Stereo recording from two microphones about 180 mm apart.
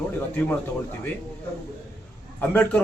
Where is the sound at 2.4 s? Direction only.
10° left (ahead or behind).